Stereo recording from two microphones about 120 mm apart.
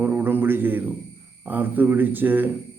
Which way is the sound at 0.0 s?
15° right (ahead or behind).